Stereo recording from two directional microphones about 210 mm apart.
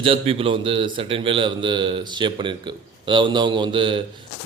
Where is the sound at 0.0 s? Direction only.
25° right (ahead or behind).